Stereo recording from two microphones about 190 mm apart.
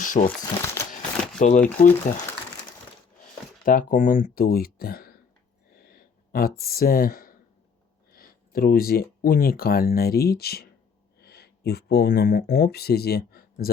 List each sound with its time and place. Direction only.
0.0 s speech: 45° left (ahead or behind)
0.6 s a sound: 15° left (ahead or behind)
1.4 s speech: 40° left (ahead or behind)
3.6 s speech: 45° left (ahead or behind)